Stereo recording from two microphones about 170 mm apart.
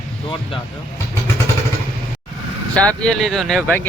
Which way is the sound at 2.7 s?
5° left (ahead or behind).